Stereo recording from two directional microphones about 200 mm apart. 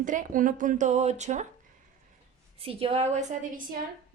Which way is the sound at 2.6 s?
30° right (ahead or behind).